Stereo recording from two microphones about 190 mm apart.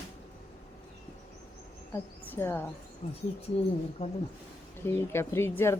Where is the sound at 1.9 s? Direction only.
10° left (ahead or behind).